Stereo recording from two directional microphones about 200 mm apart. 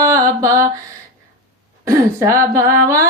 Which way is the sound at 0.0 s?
15° right (ahead or behind).